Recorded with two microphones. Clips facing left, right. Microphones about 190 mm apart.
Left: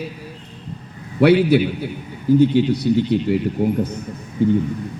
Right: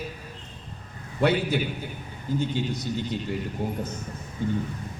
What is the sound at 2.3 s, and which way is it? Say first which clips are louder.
Speech: left 14 dB; 10° left (ahead or behind).